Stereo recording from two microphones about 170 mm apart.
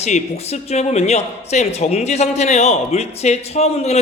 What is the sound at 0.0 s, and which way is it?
Speech, 40° left (ahead or behind).